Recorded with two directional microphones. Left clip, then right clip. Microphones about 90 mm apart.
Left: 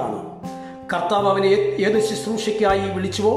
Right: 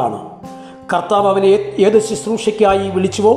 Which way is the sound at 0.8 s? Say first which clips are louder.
Right 5 dB; 15° right (ahead or behind).